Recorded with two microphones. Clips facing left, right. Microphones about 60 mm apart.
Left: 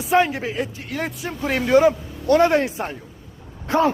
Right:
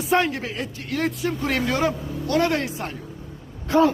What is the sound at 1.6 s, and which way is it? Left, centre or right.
A man's voice, centre.